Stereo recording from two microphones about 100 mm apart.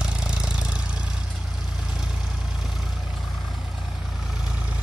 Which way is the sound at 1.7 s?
5° right (ahead or behind).